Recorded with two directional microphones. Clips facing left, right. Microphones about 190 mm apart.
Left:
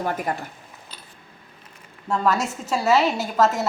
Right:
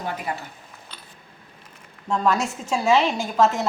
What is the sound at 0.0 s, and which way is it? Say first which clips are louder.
Speech: left 4 dB; 45° left (ahead or behind).